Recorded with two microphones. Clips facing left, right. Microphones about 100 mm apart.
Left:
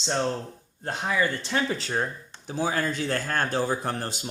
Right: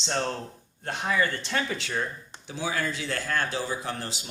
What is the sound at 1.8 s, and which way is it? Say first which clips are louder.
Speech: left 2 dB; 35° left (ahead or behind).